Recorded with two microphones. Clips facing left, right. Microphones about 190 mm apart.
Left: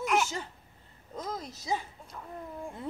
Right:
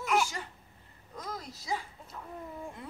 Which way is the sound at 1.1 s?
20° left (ahead or behind).